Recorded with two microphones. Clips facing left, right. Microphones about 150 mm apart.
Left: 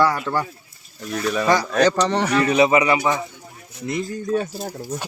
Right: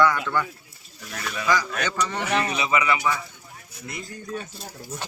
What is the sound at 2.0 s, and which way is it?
Speech, 75° left (ahead or behind).